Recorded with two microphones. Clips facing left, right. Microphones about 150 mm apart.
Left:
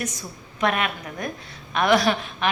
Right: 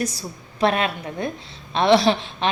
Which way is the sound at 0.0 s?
35° right (ahead or behind).